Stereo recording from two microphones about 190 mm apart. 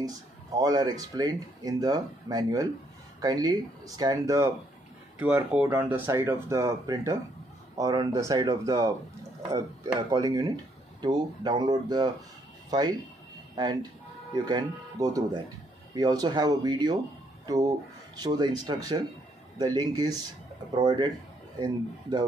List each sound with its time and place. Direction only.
0.6 s speech: 20° right (ahead or behind)
10.1 s speech: 20° right (ahead or behind)
14.3 s speech: 20° right (ahead or behind)